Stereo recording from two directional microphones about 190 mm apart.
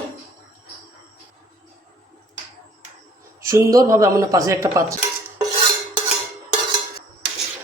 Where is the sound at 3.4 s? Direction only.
15° right (ahead or behind).